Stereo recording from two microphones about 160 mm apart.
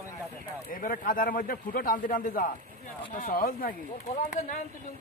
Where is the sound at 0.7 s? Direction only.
60° left (ahead or behind).